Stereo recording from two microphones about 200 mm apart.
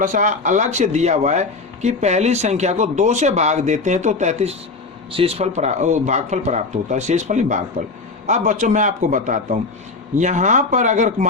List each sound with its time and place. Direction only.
0.0 s speech: 40° right (ahead or behind)